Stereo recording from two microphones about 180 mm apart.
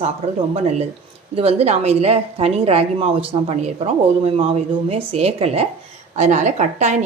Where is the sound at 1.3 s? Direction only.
35° right (ahead or behind).